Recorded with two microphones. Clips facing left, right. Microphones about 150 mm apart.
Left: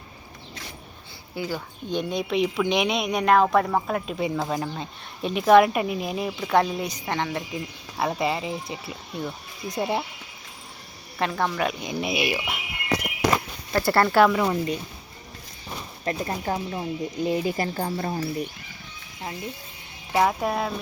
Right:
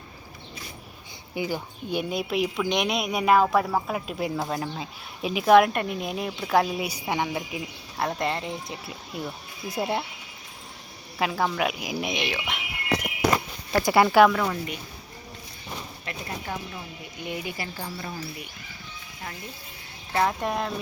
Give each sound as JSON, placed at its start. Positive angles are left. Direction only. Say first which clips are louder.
{"t": 1.4, "sound": "a woman's voice", "louder": "right 1 dB", "side_deg": -15}
{"t": 11.2, "sound": "a woman's voice", "louder": "even", "side_deg": -5}
{"t": 12.1, "sound": "speech", "louder": "left 3 dB", "side_deg": 10}
{"t": 13.9, "sound": "a woman's voice", "louder": "right 1 dB", "side_deg": -5}
{"t": 14.4, "sound": "speech", "louder": "left 5 dB", "side_deg": 20}
{"t": 16.0, "sound": "speech", "louder": "left 8 dB", "side_deg": 40}
{"t": 17.6, "sound": "speech", "louder": "left 8 dB", "side_deg": 50}
{"t": 20.1, "sound": "a woman's voice", "louder": "left 3 dB", "side_deg": 5}